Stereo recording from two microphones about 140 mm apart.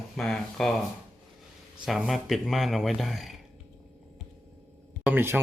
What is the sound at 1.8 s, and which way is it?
Speech, centre (ahead or behind).